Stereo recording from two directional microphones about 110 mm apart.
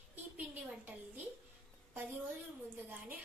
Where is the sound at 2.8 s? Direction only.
20° right (ahead or behind).